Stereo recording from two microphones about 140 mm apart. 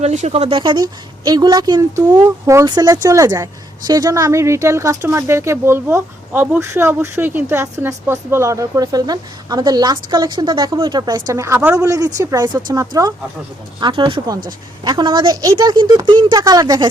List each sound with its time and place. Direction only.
0.0 s speech: 55° right (ahead or behind)
0.6 s a woman's voice: 35° right (ahead or behind)
13.7 s a woman's voice: 35° right (ahead or behind)